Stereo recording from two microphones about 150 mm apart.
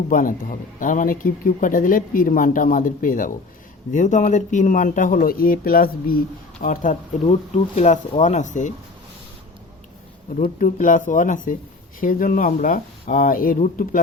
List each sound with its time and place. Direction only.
0.1 s speech: 65° left (ahead or behind)
10.4 s speech: 60° left (ahead or behind)